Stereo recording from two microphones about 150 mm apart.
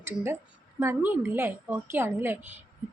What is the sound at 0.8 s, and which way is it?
A woman's voice, 15° right (ahead or behind).